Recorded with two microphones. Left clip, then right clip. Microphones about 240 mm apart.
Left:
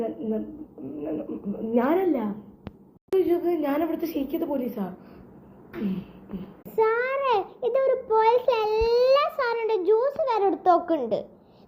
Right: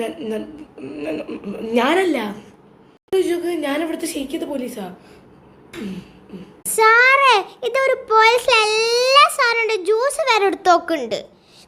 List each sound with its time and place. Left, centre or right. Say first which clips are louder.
0.0 s a child's voice: right 4 dB; centre
6.7 s a child's voice: right 11 dB; centre